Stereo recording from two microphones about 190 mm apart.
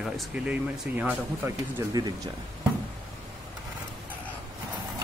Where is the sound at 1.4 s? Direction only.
20° right (ahead or behind).